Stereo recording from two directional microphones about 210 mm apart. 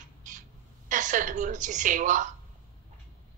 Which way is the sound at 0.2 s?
35° right (ahead or behind).